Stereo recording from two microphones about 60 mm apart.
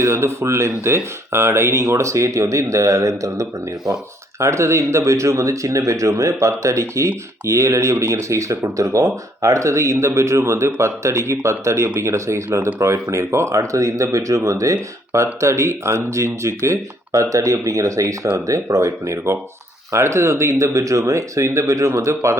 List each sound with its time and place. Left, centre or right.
0.0 s speech: right
4.4 s speech: right
17.2 s speech: right